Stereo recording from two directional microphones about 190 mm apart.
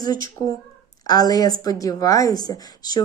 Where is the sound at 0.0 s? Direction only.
20° left (ahead or behind).